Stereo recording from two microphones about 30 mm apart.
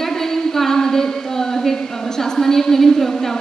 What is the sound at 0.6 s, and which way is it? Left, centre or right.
A woman's voice, centre.